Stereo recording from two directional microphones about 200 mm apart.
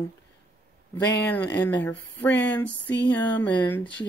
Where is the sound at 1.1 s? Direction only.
10° left (ahead or behind).